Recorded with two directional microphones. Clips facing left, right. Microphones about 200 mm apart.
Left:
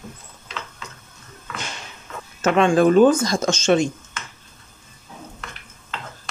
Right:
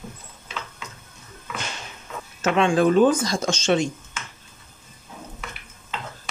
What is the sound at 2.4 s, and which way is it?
Speech, 45° left (ahead or behind).